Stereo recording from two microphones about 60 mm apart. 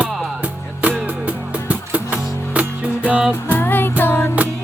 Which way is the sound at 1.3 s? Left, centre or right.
Right.